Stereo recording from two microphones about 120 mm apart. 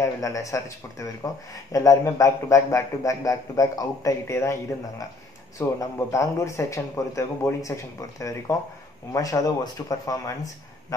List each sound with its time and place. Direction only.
0.0 s speech: 25° left (ahead or behind)